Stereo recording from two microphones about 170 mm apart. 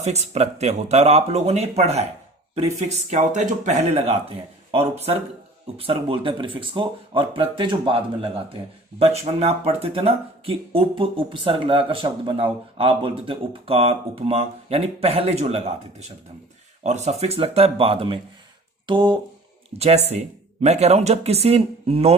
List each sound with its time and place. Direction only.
0.0 s speech: 40° right (ahead or behind)
3.1 s speech: 45° right (ahead or behind)
18.9 s a sound: 25° right (ahead or behind)
19.8 s speech: 40° right (ahead or behind)